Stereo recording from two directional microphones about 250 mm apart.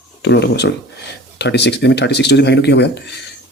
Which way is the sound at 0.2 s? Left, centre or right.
Left.